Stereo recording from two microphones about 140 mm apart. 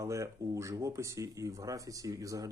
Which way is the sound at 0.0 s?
20° right (ahead or behind).